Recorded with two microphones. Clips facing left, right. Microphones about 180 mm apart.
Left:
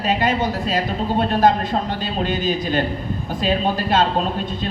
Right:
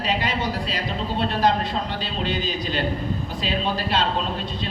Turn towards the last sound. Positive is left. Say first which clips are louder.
# left 5 dB
turn(degrees=50)  # may be behind; listen again after turning